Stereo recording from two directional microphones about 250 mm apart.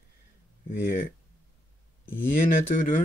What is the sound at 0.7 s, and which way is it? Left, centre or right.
Speech, left.